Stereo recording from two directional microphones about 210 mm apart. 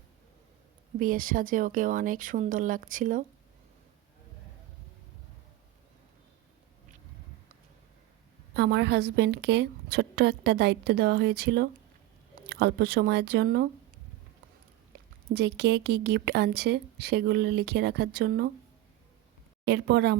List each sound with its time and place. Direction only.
0.9 s speech: 40° right (ahead or behind)
8.5 s speech: 55° right (ahead or behind)
15.3 s speech: 55° right (ahead or behind)
19.6 s speech: 55° right (ahead or behind)